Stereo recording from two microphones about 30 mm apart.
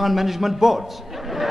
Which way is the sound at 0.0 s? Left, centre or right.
Centre.